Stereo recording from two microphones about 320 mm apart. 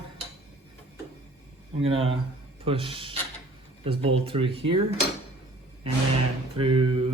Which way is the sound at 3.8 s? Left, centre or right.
Centre.